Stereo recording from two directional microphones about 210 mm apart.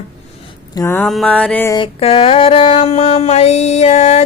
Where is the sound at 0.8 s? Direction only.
10° left (ahead or behind).